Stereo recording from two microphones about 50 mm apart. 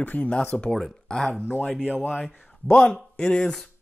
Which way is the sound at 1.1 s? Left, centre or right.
Centre.